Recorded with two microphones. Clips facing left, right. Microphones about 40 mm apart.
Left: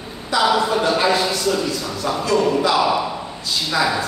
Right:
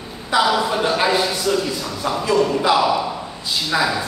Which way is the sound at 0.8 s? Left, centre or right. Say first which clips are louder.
Even; centre.